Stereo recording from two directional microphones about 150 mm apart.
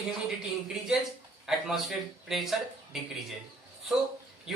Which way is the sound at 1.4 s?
Centre (ahead or behind).